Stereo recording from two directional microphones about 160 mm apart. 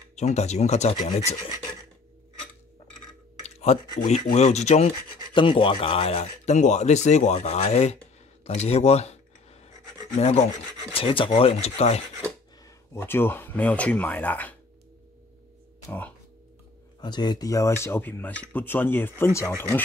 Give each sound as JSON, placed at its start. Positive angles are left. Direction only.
{"t": 0.1, "sound": "speech", "side_deg": 45}
{"t": 3.4, "sound": "speech", "side_deg": 45}
{"t": 5.3, "sound": "speech", "side_deg": 30}
{"t": 8.5, "sound": "a sound", "side_deg": 40}
{"t": 10.1, "sound": "speech", "side_deg": 45}
{"t": 10.9, "sound": "speech", "side_deg": 35}
{"t": 12.6, "sound": "speech", "side_deg": 15}
{"t": 17.0, "sound": "speech", "side_deg": 25}